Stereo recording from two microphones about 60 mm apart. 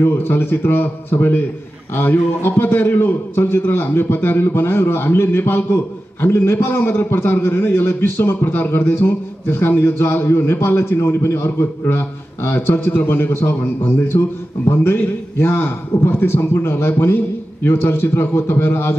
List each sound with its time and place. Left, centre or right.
0.0 s a man's voice: left
2.4 s a man's voice: left